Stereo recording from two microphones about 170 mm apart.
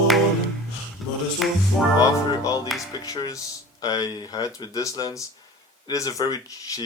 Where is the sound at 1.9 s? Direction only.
20° left (ahead or behind).